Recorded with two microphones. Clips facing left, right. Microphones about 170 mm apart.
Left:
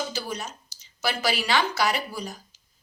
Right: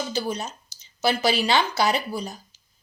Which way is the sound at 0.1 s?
25° right (ahead or behind).